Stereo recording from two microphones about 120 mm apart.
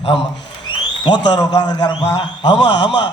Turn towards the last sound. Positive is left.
turn(degrees=40)  # may be behind; listen again after turning